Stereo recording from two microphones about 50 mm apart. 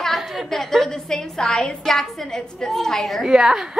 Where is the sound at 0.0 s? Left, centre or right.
Centre.